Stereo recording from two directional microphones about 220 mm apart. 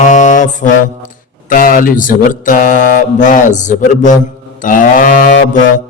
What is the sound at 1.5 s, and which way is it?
Speech, 40° left (ahead or behind).